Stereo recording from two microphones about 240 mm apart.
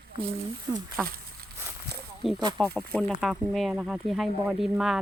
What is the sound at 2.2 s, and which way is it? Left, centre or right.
Speech, centre.